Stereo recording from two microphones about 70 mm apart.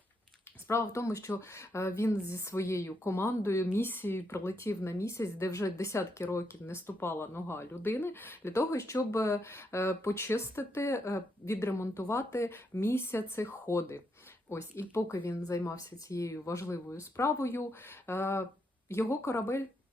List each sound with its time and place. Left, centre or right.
0.7 s speech: left
6.0 s speech: left
15.5 s speech: left